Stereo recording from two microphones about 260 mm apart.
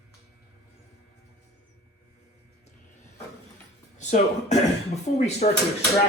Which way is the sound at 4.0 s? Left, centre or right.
Left.